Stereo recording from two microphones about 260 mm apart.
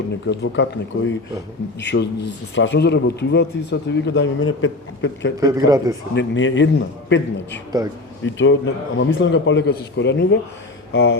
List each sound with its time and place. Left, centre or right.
0.3 s speech: left
5.4 s speech: centre
6.1 s speech: left
10.9 s mantra: left